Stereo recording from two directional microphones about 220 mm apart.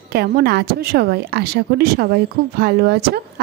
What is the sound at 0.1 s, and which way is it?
A woman's voice, 45° right (ahead or behind).